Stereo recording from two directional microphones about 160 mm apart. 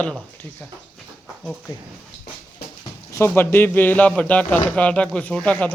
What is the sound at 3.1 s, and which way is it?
Speech, 15° left (ahead or behind).